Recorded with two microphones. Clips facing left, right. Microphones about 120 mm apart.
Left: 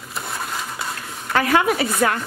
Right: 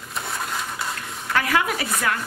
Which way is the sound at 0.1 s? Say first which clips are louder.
Even; centre (ahead or behind).